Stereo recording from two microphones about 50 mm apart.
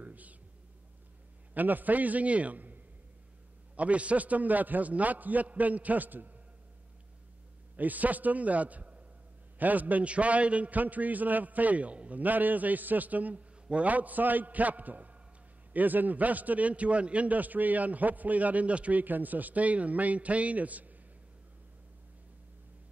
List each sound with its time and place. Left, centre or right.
0.0 s a sound: right
1.5 s a man's voice: right
7.7 s a man's voice: right